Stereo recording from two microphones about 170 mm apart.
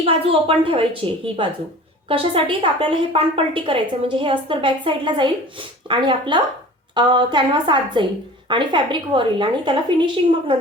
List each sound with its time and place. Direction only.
0.0 s a woman's voice: 35° right (ahead or behind)